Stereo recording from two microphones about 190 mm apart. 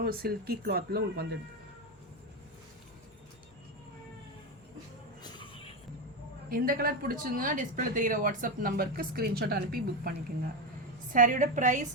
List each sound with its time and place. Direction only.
0.0 s speech: 55° right (ahead or behind)
5.2 s a sound: 25° left (ahead or behind)
6.5 s speech: 50° right (ahead or behind)